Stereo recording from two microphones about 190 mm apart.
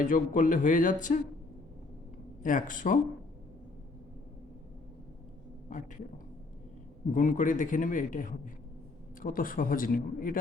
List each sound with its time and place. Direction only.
0.0 s a man's voice: 45° left (ahead or behind)
2.4 s a man's voice: 45° left (ahead or behind)
7.1 s a man's voice: 45° left (ahead or behind)